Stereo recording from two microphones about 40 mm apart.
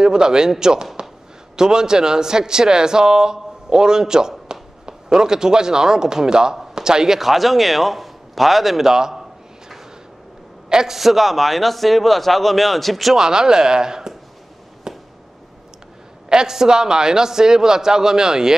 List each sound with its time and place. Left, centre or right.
0.0 s a man's voice: centre
7.2 s a man's voice: centre
10.7 s a man's voice: centre
13.2 s a man's voice: centre
14.9 s chop: centre
16.3 s a man's voice: centre